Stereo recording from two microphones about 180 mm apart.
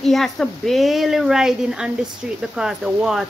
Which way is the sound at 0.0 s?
Centre (ahead or behind).